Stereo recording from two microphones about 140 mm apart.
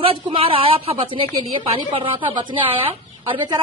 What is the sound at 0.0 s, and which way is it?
A woman's voice, 40° right (ahead or behind).